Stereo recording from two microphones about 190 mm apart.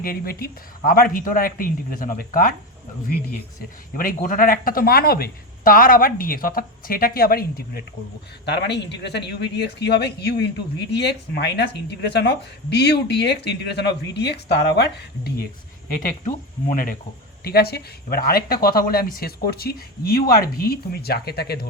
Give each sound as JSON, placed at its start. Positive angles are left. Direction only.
{"t": 0.0, "sound": "speech", "side_deg": 50}
{"t": 3.9, "sound": "speech", "side_deg": 45}
{"t": 8.4, "sound": "speech", "side_deg": 65}
{"t": 16.0, "sound": "speech", "side_deg": 45}
{"t": 17.4, "sound": "speech", "side_deg": 55}